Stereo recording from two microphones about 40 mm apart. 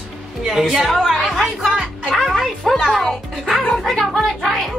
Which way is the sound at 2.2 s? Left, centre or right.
Centre.